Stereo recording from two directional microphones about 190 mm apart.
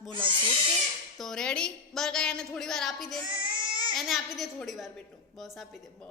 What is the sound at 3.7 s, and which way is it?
Child singing, 25° right (ahead or behind).